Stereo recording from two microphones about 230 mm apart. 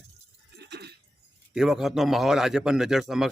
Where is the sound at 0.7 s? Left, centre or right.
Right.